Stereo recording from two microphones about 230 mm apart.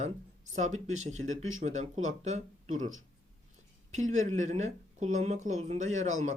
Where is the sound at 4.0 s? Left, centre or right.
Right.